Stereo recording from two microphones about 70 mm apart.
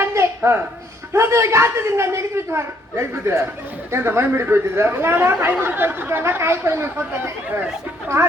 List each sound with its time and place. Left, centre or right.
0.1 s a sound: right
1.1 s a man's voice: right
8.0 s a man's voice: right